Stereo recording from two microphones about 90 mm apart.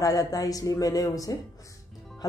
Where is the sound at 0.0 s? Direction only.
45° left (ahead or behind).